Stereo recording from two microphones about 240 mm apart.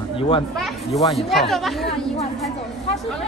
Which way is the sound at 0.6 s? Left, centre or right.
Centre.